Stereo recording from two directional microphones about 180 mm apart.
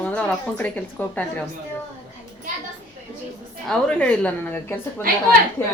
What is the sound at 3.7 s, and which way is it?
A woman's voice, 5° left (ahead or behind).